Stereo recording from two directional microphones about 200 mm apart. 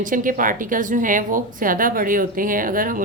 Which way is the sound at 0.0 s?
40° right (ahead or behind).